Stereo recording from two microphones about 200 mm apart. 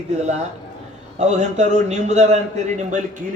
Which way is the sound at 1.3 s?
35° right (ahead or behind).